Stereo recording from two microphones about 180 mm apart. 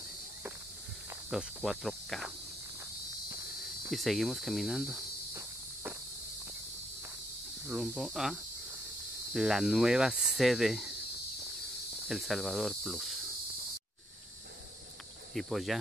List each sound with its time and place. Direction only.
1.3 s speech: centre (ahead or behind)
3.9 s speech: centre (ahead or behind)
7.6 s speech: centre (ahead or behind)
12.1 s cricket: centre (ahead or behind)
15.3 s speech: centre (ahead or behind)